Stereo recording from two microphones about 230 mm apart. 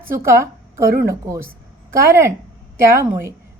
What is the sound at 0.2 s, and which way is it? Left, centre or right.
A woman's voice, centre.